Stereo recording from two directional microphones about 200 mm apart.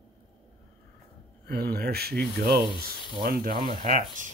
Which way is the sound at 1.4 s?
50° right (ahead or behind).